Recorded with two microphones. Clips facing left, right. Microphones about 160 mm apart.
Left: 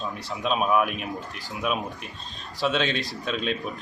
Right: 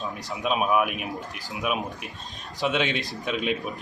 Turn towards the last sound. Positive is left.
turn(degrees=-15)  # may be behind; listen again after turning